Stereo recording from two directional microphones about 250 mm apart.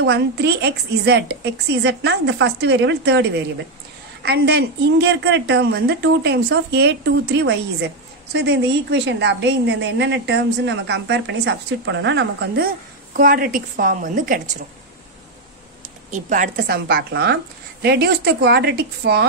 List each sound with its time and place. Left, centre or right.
0.0 s a woman's voice: right
16.1 s a woman's voice: right